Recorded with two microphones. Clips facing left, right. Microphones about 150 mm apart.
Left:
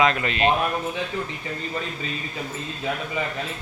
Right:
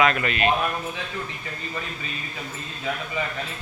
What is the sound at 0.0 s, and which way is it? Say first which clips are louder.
Speech: left 1 dB; 25° left (ahead or behind).